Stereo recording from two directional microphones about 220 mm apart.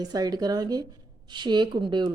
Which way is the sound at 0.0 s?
20° right (ahead or behind).